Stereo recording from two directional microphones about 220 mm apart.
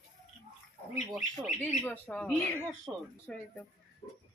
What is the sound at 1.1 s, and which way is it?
Speech, centre (ahead or behind).